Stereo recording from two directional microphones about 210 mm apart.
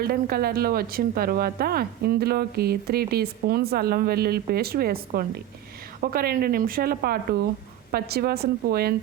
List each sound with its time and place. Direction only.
0.0 s a woman's voice: 45° right (ahead or behind)